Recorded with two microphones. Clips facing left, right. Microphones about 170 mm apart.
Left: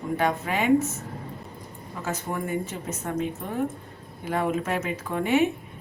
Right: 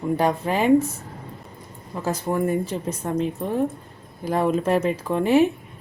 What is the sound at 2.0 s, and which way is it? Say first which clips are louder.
A woman's voice: right 7 dB; 35° right (ahead or behind).